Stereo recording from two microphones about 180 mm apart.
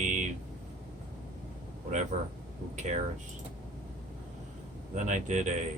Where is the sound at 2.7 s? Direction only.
40° right (ahead or behind).